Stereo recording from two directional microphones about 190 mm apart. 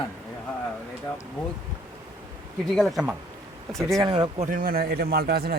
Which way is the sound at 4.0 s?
20° right (ahead or behind).